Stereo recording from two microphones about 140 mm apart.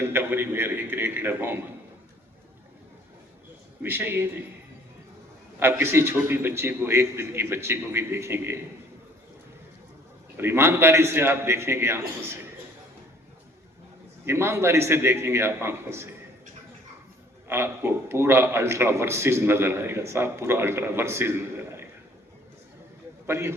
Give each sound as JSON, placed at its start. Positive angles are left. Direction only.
{"t": 0.0, "sound": "a man's voice", "side_deg": -15}
{"t": 3.8, "sound": "a man's voice", "side_deg": -15}
{"t": 5.5, "sound": "a man's voice", "side_deg": -15}
{"t": 10.3, "sound": "a man's voice", "side_deg": -15}
{"t": 14.3, "sound": "a man's voice", "side_deg": -20}
{"t": 17.5, "sound": "a man's voice", "side_deg": -15}
{"t": 23.2, "sound": "a man's voice", "side_deg": -20}